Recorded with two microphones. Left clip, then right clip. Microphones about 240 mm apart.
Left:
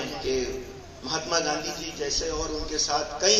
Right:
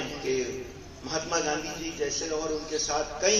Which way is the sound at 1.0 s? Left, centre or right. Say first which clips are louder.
Left 2 dB; left.